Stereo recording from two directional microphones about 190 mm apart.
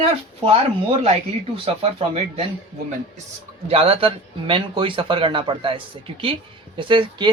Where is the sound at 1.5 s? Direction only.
30° right (ahead or behind).